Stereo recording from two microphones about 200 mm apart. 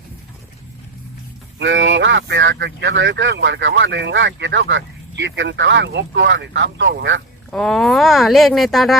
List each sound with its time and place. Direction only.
1.5 s speech: 65° right (ahead or behind)
7.5 s speech: centre (ahead or behind)